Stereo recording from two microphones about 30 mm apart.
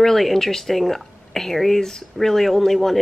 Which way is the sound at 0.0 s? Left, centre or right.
Centre.